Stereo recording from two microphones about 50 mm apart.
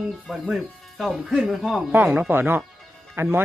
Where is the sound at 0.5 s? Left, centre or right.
Centre.